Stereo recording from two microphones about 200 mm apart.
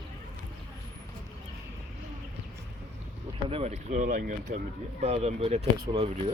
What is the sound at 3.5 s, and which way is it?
Speech, 30° right (ahead or behind).